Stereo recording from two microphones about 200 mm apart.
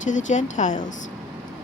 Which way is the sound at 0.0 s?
40° left (ahead or behind).